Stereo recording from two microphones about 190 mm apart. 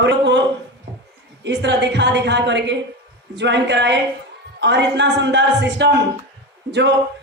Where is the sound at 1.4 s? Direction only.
65° right (ahead or behind).